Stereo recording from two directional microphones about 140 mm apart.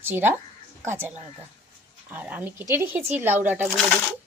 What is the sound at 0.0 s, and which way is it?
A woman's voice, 15° right (ahead or behind).